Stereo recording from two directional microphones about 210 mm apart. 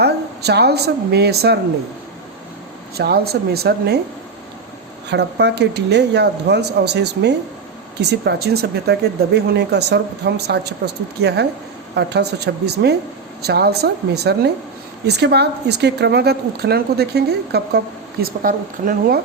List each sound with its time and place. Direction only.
0.0 s a woman's voice: 50° right (ahead or behind)
3.0 s a woman's voice: 50° right (ahead or behind)
5.0 s a woman's voice: 55° right (ahead or behind)